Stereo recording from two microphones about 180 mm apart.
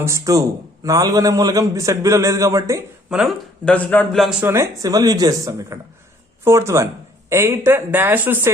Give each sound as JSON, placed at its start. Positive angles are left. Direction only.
{"t": 0.0, "sound": "speech", "side_deg": -15}
{"t": 3.1, "sound": "speech", "side_deg": 0}